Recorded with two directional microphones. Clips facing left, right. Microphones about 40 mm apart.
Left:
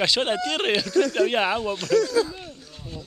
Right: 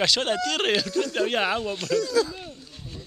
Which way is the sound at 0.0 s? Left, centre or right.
Centre.